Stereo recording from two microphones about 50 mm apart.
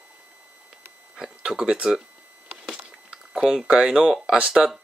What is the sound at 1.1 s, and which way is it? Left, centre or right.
Speech, centre.